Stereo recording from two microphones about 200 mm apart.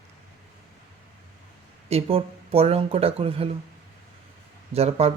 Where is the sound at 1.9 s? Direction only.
30° right (ahead or behind).